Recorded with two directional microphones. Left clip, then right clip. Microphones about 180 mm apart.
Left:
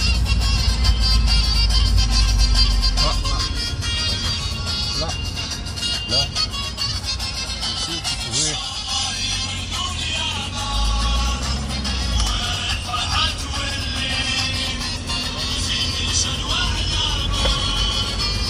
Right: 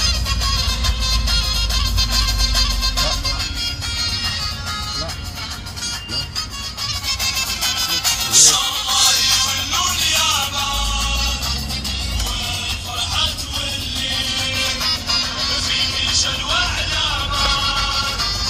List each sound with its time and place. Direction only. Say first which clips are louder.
8.3 s music: right 13 dB; 15° right (ahead or behind)
9.7 s music: right 6 dB; 55° right (ahead or behind)
9.9 s music: right 7 dB; 15° right (ahead or behind)
14.0 s music: right 1 dB; 30° right (ahead or behind)
15.0 s music: right 5 dB; 60° right (ahead or behind)